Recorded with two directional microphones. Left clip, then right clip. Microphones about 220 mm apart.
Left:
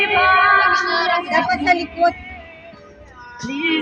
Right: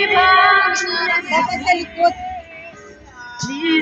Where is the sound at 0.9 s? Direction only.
35° left (ahead or behind).